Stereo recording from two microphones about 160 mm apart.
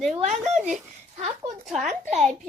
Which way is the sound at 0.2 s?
45° right (ahead or behind).